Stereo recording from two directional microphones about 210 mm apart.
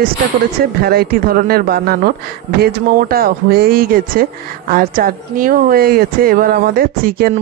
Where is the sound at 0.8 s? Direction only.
45° right (ahead or behind).